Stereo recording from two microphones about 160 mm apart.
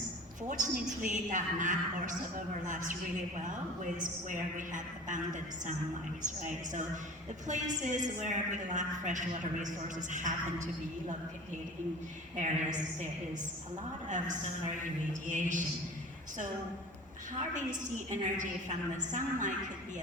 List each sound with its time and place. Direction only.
0.4 s a woman's voice: 50° right (ahead or behind)
3.9 s a woman's voice: 55° right (ahead or behind)
12.4 s a woman's voice: 50° right (ahead or behind)
14.1 s a woman's voice: 50° right (ahead or behind)
17.7 s a woman's voice: 50° right (ahead or behind)